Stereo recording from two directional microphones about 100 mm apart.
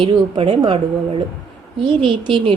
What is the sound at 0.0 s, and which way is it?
A woman's voice, 65° right (ahead or behind).